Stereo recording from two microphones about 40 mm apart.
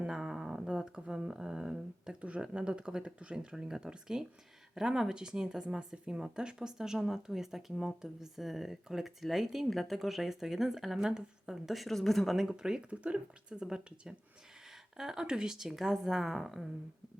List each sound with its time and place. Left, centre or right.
0.1 s speech: centre
12.4 s speech: centre